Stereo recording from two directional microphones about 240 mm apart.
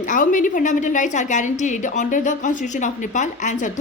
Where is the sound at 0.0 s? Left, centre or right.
Left.